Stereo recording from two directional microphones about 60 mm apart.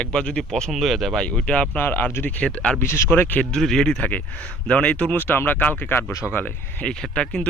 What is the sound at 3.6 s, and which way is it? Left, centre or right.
Speech, centre.